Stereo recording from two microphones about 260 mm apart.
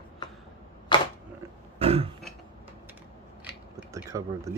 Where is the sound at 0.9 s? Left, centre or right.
Centre.